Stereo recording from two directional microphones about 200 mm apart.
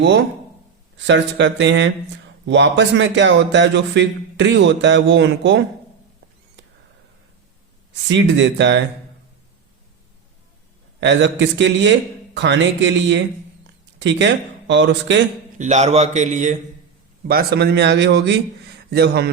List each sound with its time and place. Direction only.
0.9 s a man's voice: 65° right (ahead or behind)
8.0 s a man's voice: 60° right (ahead or behind)
11.0 s a man's voice: 60° right (ahead or behind)
15.5 s a man's voice: 35° right (ahead or behind)
17.2 s a man's voice: 50° right (ahead or behind)